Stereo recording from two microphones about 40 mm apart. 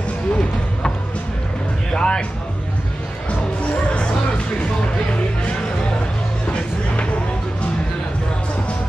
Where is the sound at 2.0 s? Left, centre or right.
Left.